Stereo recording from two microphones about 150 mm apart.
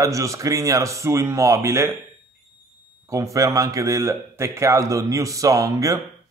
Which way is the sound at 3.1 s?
20° right (ahead or behind).